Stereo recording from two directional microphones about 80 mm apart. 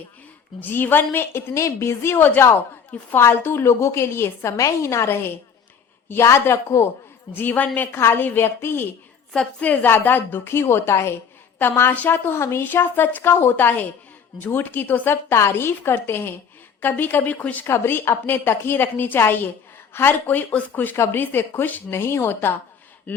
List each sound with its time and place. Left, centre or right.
0.6 s a woman's voice: left
7.3 s a woman's voice: left
7.9 s a woman's voice: left
9.3 s a woman's voice: centre
15.1 s a woman's voice: left